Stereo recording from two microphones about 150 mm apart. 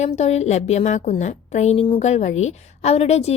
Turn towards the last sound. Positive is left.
turn(degrees=45)  # may be behind; listen again after turning